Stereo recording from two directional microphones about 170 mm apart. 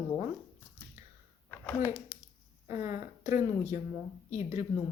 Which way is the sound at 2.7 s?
15° right (ahead or behind).